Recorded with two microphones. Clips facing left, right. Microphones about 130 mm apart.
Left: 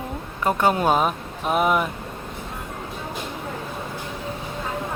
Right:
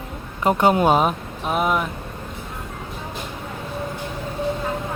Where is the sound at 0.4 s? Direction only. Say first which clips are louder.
Right 3 dB; 15° right (ahead or behind).